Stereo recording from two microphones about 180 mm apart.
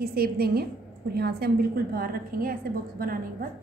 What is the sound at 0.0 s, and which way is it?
A woman's voice, 60° right (ahead or behind).